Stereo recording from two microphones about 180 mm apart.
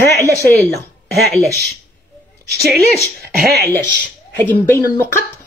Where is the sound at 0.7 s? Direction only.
Centre (ahead or behind).